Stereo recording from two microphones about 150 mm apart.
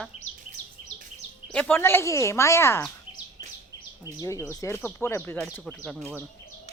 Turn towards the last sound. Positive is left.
turn(degrees=0)  # may be behind; listen again after turning